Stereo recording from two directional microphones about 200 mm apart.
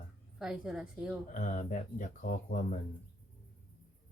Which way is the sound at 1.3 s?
40° left (ahead or behind).